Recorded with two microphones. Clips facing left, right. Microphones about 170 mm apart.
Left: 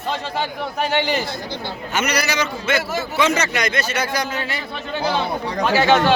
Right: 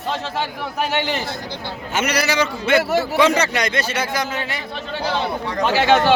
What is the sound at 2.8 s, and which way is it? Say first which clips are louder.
Speech: right 6 dB; 65° right (ahead or behind).